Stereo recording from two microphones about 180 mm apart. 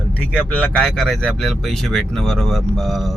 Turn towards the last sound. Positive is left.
turn(degrees=0)  # may be behind; listen again after turning